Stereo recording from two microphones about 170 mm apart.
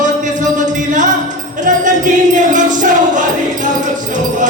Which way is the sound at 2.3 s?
50° right (ahead or behind).